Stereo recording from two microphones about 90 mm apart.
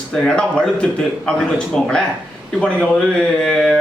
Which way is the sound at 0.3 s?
10° left (ahead or behind).